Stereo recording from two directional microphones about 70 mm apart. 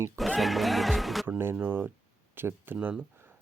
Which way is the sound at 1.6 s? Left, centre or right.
Right.